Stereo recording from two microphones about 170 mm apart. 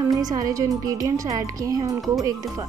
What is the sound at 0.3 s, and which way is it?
A woman's voice, 20° right (ahead or behind).